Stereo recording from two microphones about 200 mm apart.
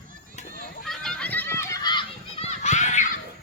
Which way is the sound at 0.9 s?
5° left (ahead or behind).